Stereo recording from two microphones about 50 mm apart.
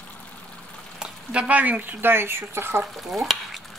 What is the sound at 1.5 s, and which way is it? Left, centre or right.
Speech, right.